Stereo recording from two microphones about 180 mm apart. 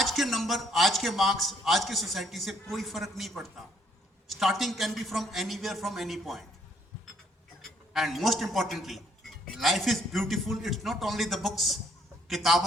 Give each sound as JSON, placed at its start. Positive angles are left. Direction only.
{"t": 0.0, "sound": "a man's voice", "side_deg": 0}
{"t": 7.6, "sound": "a man's voice", "side_deg": 0}